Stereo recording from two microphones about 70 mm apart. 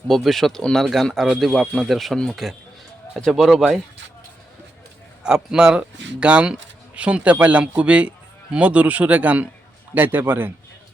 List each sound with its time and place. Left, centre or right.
0.1 s speech: centre
5.2 s a man's voice: centre; by 10.5 s right